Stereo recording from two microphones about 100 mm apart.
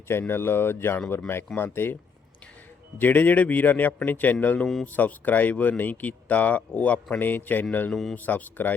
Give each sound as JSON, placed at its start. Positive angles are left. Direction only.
{"t": 0.1, "sound": "speech", "side_deg": 25}
{"t": 3.0, "sound": "speech", "side_deg": 20}
{"t": 4.6, "sound": "speech", "side_deg": 5}
{"t": 4.9, "sound": "speech", "side_deg": 15}